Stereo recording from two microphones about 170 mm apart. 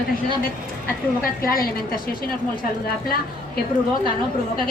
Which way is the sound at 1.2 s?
60° left (ahead or behind).